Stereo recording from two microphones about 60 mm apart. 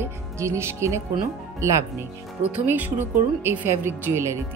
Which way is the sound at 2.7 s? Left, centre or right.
Right.